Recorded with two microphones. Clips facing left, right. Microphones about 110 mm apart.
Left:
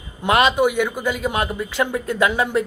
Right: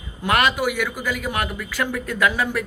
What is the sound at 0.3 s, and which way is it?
A man's voice, 20° left (ahead or behind).